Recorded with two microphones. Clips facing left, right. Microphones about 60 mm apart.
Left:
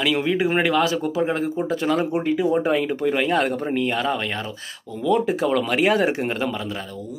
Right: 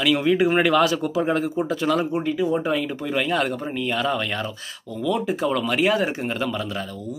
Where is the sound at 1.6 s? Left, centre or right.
Left.